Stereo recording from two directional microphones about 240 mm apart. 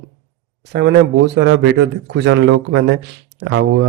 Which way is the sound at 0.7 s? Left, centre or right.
Right.